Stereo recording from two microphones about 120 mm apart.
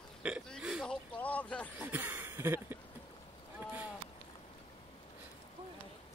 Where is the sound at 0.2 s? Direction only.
10° right (ahead or behind).